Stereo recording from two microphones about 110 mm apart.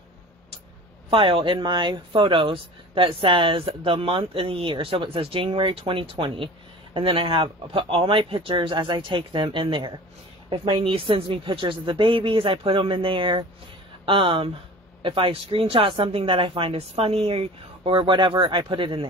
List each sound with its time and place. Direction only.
1.1 s speech: 50° right (ahead or behind)